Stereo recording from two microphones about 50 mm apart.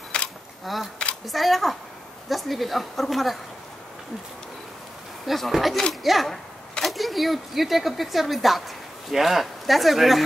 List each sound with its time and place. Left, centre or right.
0.1 s a sound: left
0.7 s a woman's voice: centre
5.2 s a woman's voice: centre